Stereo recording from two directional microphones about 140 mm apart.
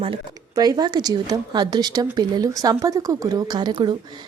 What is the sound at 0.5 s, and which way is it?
Speech, 30° right (ahead or behind).